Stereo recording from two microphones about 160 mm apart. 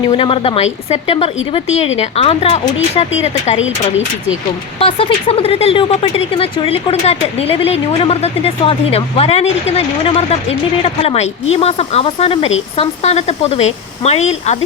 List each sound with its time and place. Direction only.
0.1 s speech: 35° left (ahead or behind)
4.8 s speech: 35° left (ahead or behind)